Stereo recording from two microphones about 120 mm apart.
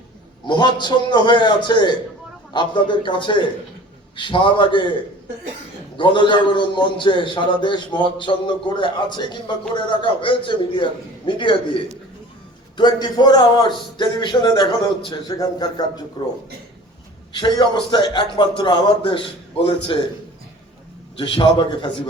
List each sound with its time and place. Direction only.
0.4 s a man's voice: 40° left (ahead or behind)
6.0 s a man's voice: 40° left (ahead or behind)
17.3 s a man's voice: 40° left (ahead or behind)
21.2 s a man's voice: 40° left (ahead or behind)